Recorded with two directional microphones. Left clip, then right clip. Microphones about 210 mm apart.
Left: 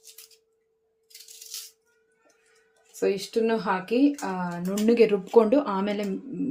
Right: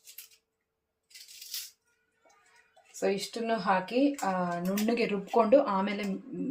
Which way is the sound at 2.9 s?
40° left (ahead or behind).